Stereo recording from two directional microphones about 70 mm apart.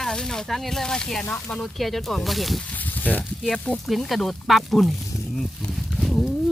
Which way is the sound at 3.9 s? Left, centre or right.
Centre.